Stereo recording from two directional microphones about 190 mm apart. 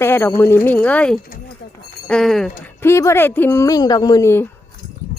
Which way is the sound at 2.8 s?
15° left (ahead or behind).